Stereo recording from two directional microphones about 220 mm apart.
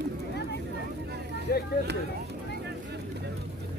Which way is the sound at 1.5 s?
45° left (ahead or behind).